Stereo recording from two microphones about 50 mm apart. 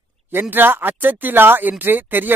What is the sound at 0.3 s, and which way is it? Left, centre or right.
Speech, right.